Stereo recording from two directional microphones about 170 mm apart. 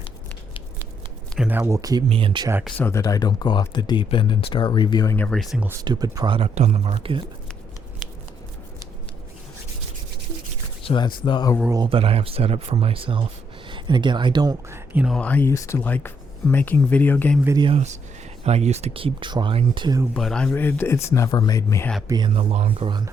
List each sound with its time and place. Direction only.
1.4 s speech: 10° right (ahead or behind)
2.0 s speech: 30° right (ahead or behind)
2.6 s speech: 10° left (ahead or behind)
5.1 s speech: 5° left (ahead or behind)
5.8 s speech: 25° right (ahead or behind)
10.8 s speech: 25° left (ahead or behind)
11.7 s speech: 30° right (ahead or behind)
14.7 s a sound: 10° right (ahead or behind)
15.1 s speech: 10° left (ahead or behind)
17.6 s speech: 35° right (ahead or behind)
20.1 s speech: 5° left (ahead or behind)
22.0 s speech: 25° right (ahead or behind)